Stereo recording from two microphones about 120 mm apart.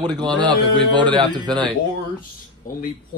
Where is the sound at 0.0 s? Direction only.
35° right (ahead or behind).